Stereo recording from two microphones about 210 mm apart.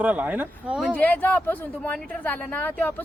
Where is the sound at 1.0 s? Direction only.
10° left (ahead or behind).